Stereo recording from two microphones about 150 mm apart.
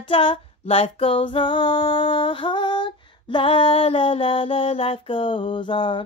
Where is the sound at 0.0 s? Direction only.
35° left (ahead or behind).